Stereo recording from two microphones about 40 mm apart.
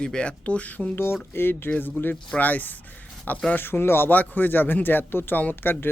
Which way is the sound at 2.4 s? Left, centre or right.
Left.